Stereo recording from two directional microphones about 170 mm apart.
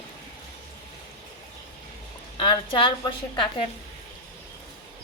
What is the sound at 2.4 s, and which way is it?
A woman's voice, 30° left (ahead or behind).